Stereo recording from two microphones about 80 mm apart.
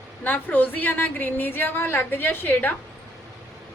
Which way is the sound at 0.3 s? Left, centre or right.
Left.